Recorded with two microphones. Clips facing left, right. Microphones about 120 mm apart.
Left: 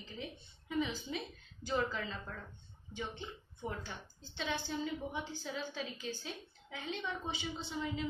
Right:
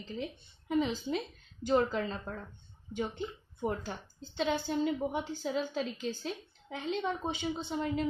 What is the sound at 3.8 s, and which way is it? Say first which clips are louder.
A woman's voice: right 6 dB; 45° right (ahead or behind).